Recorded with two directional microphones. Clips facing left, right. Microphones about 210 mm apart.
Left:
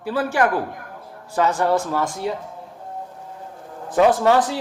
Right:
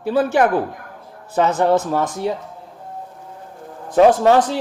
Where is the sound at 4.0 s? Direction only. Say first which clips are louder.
Right 4 dB; 20° right (ahead or behind).